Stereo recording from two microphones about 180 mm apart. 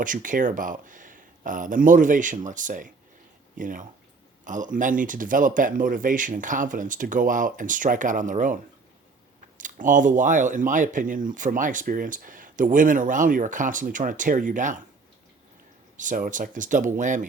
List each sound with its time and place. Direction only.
0.0 s speech: 50° right (ahead or behind)
16.0 s speech: 45° right (ahead or behind)